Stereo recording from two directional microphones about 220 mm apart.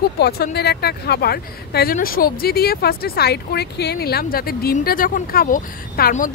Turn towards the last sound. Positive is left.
turn(degrees=40)  # may be behind; listen again after turning